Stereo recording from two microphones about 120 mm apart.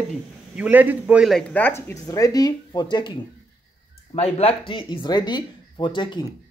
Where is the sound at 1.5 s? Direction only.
20° left (ahead or behind); by 3.2 s 40° left (ahead or behind).